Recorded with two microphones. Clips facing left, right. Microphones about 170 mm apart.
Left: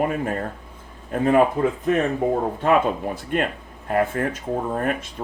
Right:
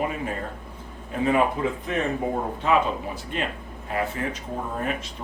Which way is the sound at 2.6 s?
50° left (ahead or behind).